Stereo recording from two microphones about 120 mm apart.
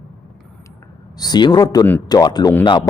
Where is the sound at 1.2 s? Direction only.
35° left (ahead or behind).